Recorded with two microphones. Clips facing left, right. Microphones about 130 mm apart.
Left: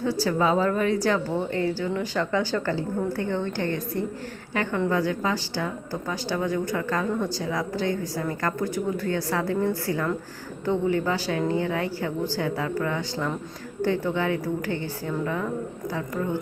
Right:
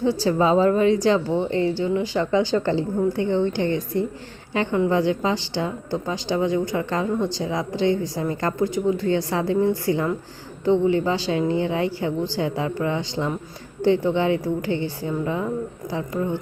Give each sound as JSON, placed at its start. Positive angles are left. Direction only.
{"t": 0.0, "sound": "a woman's voice", "side_deg": -25}